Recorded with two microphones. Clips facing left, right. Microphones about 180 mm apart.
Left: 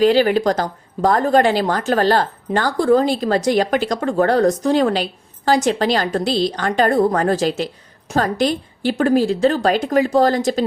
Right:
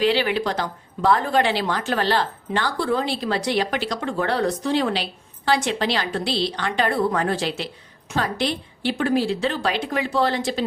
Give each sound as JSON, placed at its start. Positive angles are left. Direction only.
{"t": 0.0, "sound": "a woman's voice", "side_deg": 45}